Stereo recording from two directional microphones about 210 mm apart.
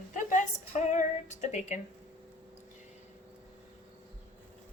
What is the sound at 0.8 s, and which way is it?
Female singing, 35° left (ahead or behind).